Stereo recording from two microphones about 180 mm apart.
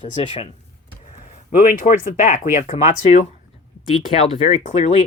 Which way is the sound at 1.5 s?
50° left (ahead or behind).